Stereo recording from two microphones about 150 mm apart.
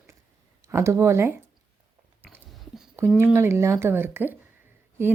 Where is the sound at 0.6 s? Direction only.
20° right (ahead or behind).